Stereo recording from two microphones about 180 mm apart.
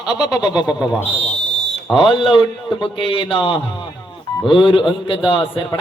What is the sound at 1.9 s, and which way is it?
A man's voice, 30° left (ahead or behind).